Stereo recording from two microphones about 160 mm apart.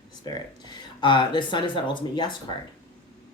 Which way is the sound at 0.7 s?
30° left (ahead or behind).